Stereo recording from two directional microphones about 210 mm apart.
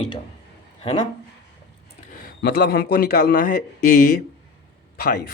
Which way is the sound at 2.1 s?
45° left (ahead or behind).